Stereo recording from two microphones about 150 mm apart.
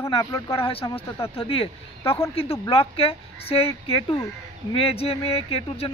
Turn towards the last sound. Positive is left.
turn(degrees=40)  # may be behind; listen again after turning